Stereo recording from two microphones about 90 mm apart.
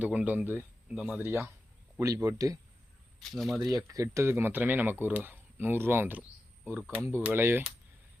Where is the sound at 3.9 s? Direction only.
35° right (ahead or behind).